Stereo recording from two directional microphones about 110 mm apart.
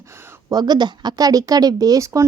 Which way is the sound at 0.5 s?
40° right (ahead or behind).